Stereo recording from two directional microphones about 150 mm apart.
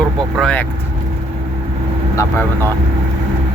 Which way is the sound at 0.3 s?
5° left (ahead or behind).